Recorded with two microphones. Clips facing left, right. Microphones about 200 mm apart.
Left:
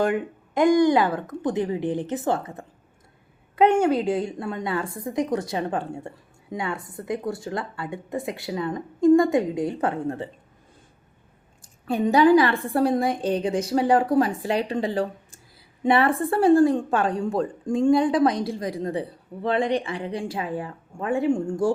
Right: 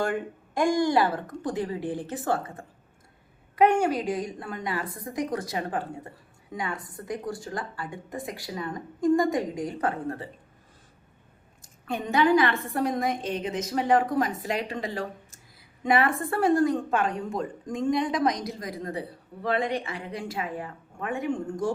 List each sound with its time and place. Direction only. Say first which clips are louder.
0.0 s a woman's voice: left 5 dB; 20° left (ahead or behind)
11.9 s a woman's voice: left 6 dB; 35° left (ahead or behind)